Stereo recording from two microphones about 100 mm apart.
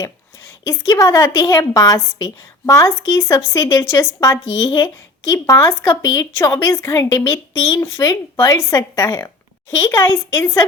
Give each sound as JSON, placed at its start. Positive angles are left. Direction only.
{"t": 0.0, "sound": "a woman's voice", "side_deg": 30}